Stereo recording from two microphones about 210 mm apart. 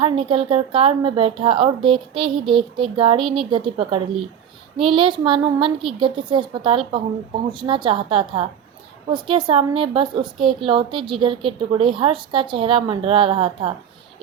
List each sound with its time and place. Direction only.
0.0 s a woman's voice: 25° right (ahead or behind)